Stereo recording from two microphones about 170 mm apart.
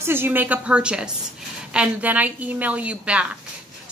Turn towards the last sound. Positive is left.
turn(degrees=-5)  # may be behind; listen again after turning